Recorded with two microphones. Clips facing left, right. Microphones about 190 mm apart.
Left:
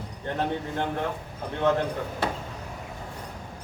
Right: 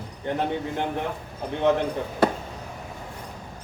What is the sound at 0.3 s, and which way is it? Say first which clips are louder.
Speech: right 1 dB; 15° right (ahead or behind).